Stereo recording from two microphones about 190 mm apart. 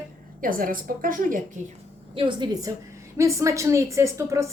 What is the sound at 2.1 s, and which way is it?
A woman's voice, 25° right (ahead or behind).